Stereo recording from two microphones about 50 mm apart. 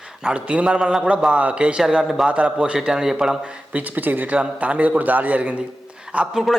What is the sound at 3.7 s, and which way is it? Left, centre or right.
Speech, right.